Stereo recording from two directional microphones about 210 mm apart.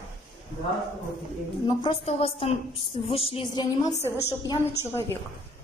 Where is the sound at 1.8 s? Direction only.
30° left (ahead or behind).